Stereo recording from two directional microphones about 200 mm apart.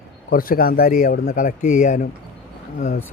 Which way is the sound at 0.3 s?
45° left (ahead or behind).